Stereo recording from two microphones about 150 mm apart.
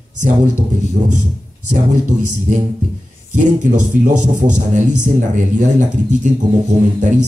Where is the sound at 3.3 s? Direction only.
55° right (ahead or behind).